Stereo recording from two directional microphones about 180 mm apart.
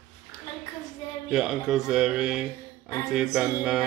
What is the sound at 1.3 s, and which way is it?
Speech, 5° right (ahead or behind).